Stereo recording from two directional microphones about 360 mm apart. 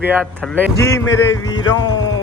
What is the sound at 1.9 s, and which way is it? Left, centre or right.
Speech, left.